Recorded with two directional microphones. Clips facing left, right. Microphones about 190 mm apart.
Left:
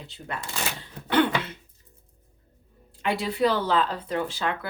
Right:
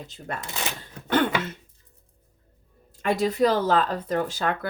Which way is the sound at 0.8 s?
45° right (ahead or behind).